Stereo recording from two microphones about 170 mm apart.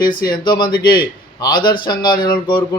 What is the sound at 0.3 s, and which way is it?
Speech, 25° left (ahead or behind).